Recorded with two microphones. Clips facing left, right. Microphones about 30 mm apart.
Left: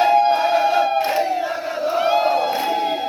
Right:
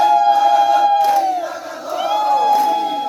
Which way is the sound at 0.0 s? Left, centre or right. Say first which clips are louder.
Right 3 dB; left.